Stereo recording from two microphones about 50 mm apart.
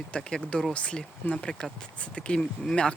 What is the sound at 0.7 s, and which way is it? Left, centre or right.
Speech, left.